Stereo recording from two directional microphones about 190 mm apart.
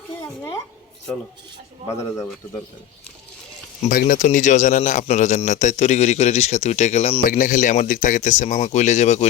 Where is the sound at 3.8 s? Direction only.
45° left (ahead or behind).